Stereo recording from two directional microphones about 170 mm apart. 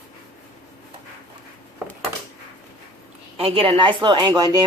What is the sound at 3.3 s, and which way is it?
A woman's voice, 35° right (ahead or behind).